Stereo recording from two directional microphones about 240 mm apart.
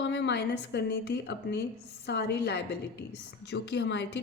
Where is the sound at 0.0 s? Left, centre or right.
Left.